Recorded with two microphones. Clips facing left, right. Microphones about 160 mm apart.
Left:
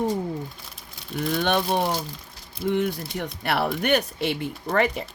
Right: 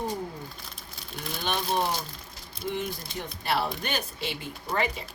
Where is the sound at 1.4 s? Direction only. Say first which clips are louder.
Left 4 dB; 70° left (ahead or behind).